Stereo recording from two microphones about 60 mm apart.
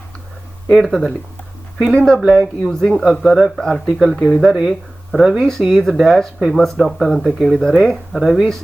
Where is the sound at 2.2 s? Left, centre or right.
Centre.